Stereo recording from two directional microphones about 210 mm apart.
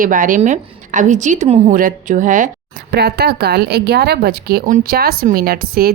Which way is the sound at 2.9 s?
50° right (ahead or behind).